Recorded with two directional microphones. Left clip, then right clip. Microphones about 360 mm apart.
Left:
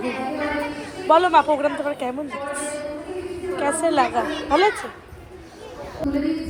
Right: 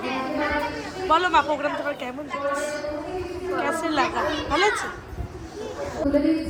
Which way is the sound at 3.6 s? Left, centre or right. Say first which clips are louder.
Left 5 dB; centre.